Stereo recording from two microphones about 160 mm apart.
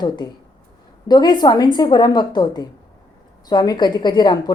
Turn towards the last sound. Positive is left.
turn(degrees=25)  # may be behind; listen again after turning